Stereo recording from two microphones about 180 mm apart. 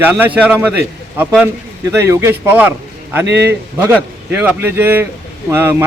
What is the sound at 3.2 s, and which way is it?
Speech, 70° right (ahead or behind).